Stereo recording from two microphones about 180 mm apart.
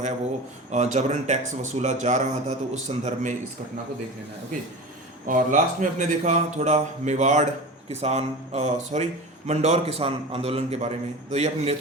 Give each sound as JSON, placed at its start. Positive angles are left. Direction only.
{"t": 0.7, "sound": "speech", "side_deg": -40}
{"t": 5.2, "sound": "speech", "side_deg": -45}